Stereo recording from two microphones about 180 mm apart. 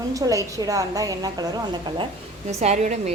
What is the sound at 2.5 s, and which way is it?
Speech, 40° right (ahead or behind).